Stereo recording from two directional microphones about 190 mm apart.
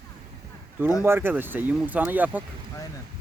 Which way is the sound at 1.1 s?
10° right (ahead or behind).